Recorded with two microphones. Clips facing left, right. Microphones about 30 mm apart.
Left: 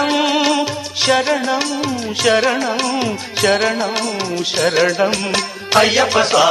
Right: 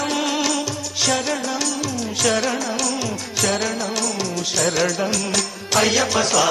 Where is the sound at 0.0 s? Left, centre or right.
Left.